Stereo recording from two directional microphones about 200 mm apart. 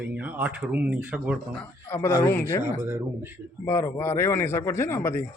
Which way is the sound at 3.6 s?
15° left (ahead or behind).